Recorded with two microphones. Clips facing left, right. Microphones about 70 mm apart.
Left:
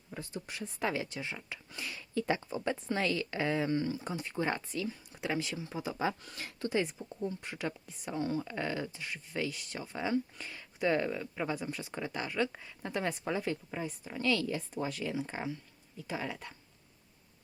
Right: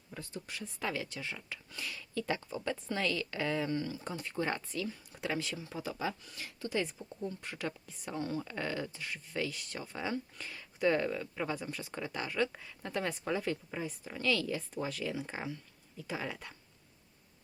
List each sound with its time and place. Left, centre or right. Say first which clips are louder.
0.1 s speech: left 2 dB; centre
6.2 s speech: left 4 dB; left
7.3 s speech: left 1 dB; centre